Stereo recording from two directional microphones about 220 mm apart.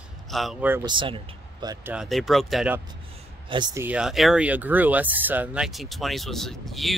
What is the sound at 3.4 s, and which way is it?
Speech, 20° right (ahead or behind).